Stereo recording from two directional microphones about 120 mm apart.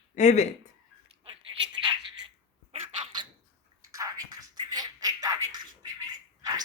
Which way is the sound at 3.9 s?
30° right (ahead or behind).